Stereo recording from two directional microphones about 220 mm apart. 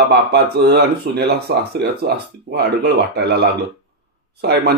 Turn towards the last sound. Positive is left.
turn(degrees=-45)  # may be behind; listen again after turning